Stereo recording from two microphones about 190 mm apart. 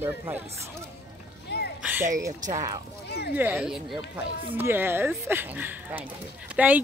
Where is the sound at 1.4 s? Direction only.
60° left (ahead or behind).